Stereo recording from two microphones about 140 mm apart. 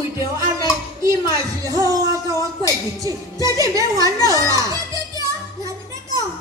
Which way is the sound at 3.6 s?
25° right (ahead or behind).